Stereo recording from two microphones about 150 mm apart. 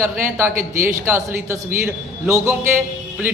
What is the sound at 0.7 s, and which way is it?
Speech, 15° right (ahead or behind).